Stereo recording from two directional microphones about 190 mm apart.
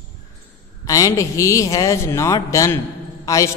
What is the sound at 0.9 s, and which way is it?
A man's voice, 15° left (ahead or behind).